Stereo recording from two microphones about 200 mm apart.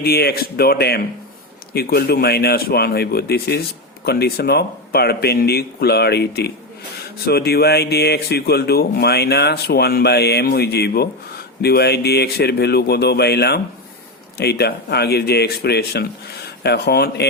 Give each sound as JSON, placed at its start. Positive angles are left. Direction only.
{"t": 0.0, "sound": "speech", "side_deg": 50}